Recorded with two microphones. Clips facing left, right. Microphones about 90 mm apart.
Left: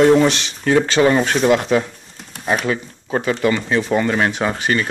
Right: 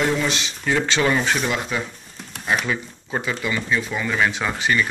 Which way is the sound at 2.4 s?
40° left (ahead or behind).